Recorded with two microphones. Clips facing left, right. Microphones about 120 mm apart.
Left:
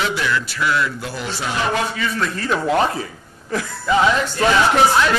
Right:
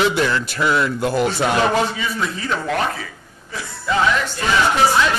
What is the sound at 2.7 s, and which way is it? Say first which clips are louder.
Speech: left 5 dB; 30° left (ahead or behind).